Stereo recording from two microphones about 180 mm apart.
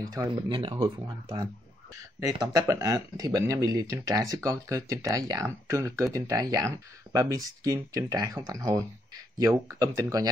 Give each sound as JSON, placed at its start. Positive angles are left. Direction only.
{"t": 0.0, "sound": "speech", "side_deg": -20}